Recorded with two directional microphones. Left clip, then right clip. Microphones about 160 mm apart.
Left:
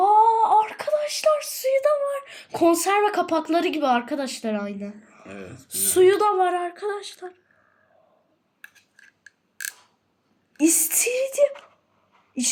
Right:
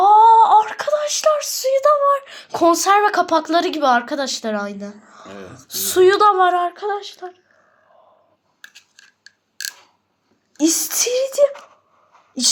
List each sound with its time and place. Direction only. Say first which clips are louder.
0.0 s a sound: right 7 dB; 10° left (ahead or behind)
5.3 s speech: right 2 dB; 20° left (ahead or behind)
5.6 s speech: right 4 dB; 5° left (ahead or behind)
9.0 s scissors: right 3 dB; 5° right (ahead or behind)
10.6 s speech: right 3 dB; 10° left (ahead or behind)